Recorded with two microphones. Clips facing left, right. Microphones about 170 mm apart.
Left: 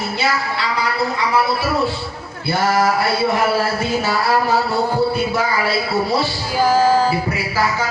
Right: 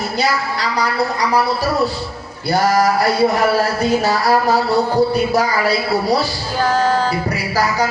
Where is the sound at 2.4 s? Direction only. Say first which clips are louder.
Right 2 dB; 40° right (ahead or behind).